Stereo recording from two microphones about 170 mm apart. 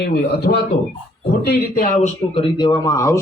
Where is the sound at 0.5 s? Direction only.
60° left (ahead or behind).